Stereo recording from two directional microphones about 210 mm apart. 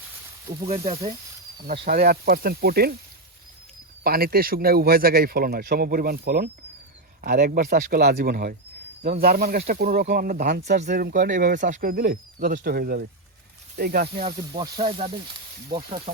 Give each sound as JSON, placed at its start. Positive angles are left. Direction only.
{"t": 1.6, "sound": "speech", "side_deg": -50}
{"t": 4.0, "sound": "speech", "side_deg": -45}
{"t": 14.2, "sound": "speech", "side_deg": -25}